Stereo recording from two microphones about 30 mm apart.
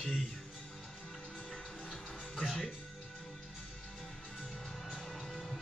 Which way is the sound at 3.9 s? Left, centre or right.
Centre.